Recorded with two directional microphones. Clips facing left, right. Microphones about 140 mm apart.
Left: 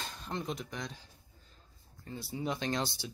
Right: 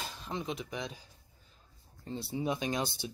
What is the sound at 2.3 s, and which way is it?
Speech, 15° right (ahead or behind).